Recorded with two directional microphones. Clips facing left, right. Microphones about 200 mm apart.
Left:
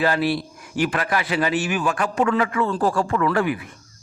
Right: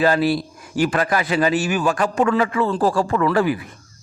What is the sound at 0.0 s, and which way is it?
A man's voice, 40° right (ahead or behind).